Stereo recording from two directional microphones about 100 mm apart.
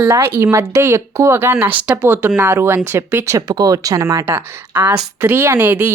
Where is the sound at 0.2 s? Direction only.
25° right (ahead or behind).